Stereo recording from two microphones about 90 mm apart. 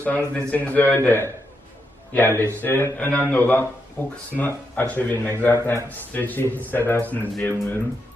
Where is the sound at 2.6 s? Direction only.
25° left (ahead or behind).